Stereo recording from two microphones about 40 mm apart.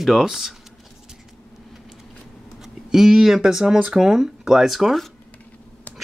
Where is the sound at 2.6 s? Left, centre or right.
Centre.